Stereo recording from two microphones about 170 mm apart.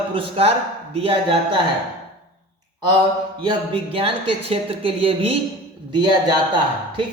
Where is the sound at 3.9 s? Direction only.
35° right (ahead or behind).